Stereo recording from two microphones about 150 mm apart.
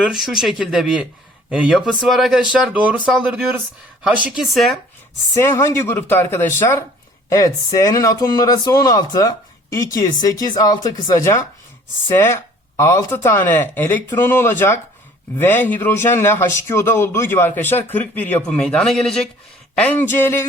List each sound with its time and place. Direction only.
0.0 s speech: centre (ahead or behind)
5.3 s speech: 15° left (ahead or behind)